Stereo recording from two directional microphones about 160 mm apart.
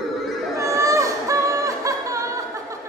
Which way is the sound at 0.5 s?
20° right (ahead or behind).